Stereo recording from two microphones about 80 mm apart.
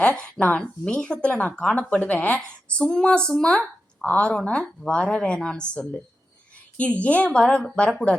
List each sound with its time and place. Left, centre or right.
0.0 s speech: centre